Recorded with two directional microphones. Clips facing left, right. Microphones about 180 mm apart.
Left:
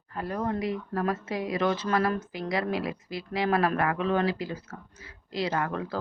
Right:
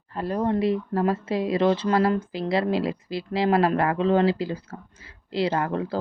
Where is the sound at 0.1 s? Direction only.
30° right (ahead or behind).